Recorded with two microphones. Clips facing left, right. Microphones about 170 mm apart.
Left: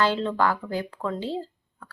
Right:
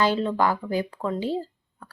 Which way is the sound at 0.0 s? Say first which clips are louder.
Right 1 dB; 10° right (ahead or behind).